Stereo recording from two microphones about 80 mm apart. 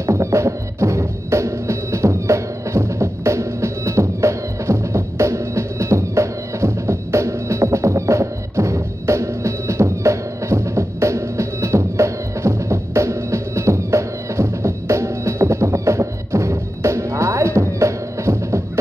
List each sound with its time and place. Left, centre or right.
0.0 s music: right